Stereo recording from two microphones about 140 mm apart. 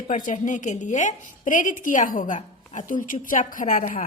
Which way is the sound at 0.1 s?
65° left (ahead or behind).